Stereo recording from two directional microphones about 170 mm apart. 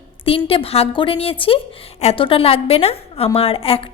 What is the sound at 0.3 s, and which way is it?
A woman's voice, 35° left (ahead or behind).